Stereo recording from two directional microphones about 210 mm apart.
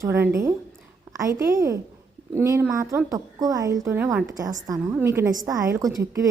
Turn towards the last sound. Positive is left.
turn(degrees=-15)  # may be behind; listen again after turning